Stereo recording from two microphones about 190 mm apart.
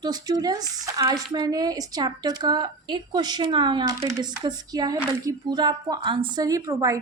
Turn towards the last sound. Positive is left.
turn(degrees=-15)  # may be behind; listen again after turning